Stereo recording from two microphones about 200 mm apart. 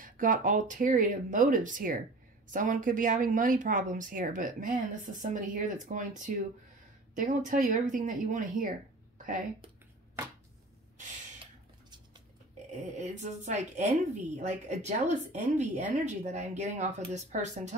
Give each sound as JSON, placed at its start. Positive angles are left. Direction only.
{"t": 0.0, "sound": "a woman's voice", "side_deg": -40}
{"t": 12.7, "sound": "a woman's voice", "side_deg": -35}